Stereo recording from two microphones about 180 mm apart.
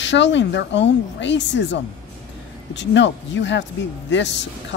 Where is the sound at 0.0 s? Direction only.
85° left.